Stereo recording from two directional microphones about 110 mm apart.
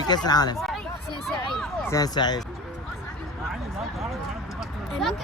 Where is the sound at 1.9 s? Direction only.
35° left (ahead or behind).